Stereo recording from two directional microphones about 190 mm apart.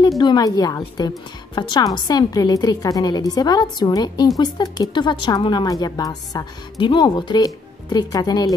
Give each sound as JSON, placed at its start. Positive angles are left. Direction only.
{"t": 0.2, "sound": "speech", "side_deg": 20}